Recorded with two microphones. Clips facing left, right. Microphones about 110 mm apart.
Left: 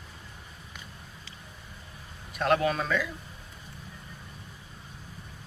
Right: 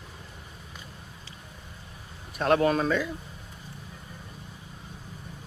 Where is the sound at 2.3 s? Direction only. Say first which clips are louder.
Right 3 dB; 40° right (ahead or behind).